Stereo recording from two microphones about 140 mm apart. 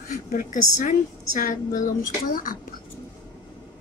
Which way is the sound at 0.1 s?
75° left (ahead or behind).